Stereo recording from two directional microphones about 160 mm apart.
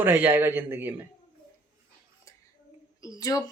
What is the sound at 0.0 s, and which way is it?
Speech, 10° right (ahead or behind).